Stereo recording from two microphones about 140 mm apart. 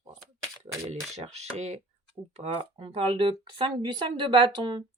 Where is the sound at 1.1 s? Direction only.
50° right (ahead or behind); by 4.8 s 35° right (ahead or behind).